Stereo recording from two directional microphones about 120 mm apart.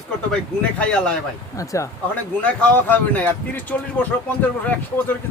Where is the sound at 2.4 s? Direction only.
10° left (ahead or behind).